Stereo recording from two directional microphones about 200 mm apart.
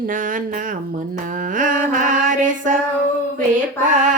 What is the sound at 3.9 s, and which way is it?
Music, 40° right (ahead or behind).